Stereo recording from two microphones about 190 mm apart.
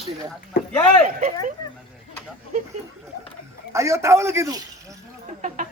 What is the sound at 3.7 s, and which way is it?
Speech, 15° right (ahead or behind).